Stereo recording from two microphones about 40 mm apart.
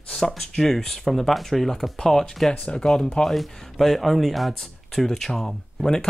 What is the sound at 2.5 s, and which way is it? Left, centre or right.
Speech, left.